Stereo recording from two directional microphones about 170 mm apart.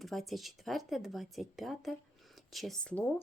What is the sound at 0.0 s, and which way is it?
A woman's voice, centre (ahead or behind).